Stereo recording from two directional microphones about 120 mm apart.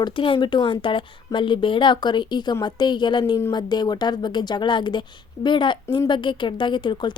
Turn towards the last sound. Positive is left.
turn(degrees=40)  # may be behind; listen again after turning